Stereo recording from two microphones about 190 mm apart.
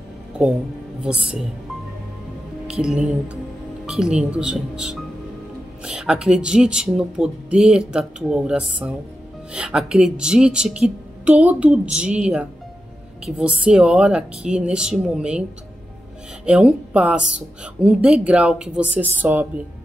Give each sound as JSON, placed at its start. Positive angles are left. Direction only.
{"t": 1.0, "sound": "speech", "side_deg": -5}
{"t": 2.7, "sound": "speech", "side_deg": -5}
{"t": 16.4, "sound": "speech", "side_deg": -5}